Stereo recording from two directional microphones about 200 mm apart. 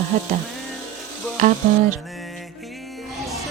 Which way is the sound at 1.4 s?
40° right (ahead or behind).